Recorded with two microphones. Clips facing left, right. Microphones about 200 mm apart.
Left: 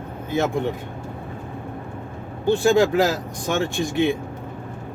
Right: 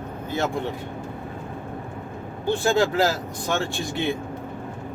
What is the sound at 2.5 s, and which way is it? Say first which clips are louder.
Speech: left 4 dB; 15° left (ahead or behind).